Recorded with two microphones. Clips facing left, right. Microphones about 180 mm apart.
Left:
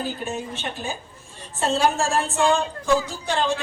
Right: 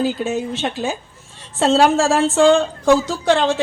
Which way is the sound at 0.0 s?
90° right.